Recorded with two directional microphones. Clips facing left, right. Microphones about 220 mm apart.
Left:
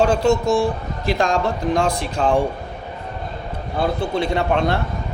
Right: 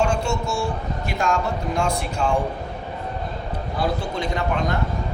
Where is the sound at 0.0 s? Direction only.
35° left (ahead or behind).